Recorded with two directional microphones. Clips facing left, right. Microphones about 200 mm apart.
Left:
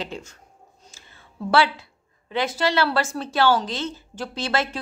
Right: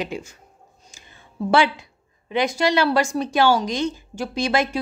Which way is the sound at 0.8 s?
15° right (ahead or behind).